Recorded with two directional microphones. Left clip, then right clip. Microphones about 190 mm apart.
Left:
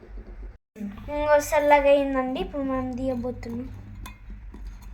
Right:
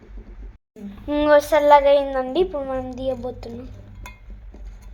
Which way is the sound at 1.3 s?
30° right (ahead or behind).